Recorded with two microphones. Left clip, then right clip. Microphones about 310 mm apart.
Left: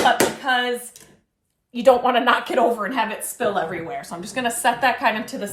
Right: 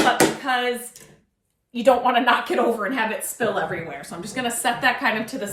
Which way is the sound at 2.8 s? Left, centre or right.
Centre.